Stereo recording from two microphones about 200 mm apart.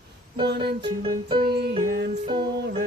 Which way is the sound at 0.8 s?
25° right (ahead or behind).